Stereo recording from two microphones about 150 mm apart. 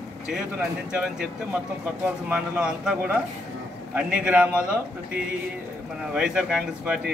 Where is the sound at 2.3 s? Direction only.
5° right (ahead or behind).